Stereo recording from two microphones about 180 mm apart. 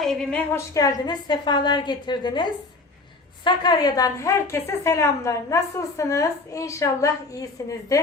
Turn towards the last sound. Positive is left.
turn(degrees=20)  # may be behind; listen again after turning